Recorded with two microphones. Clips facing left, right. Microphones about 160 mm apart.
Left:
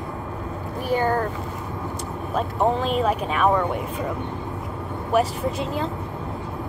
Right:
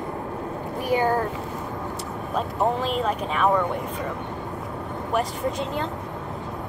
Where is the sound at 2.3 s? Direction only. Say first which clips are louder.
Left 2 dB; centre (ahead or behind).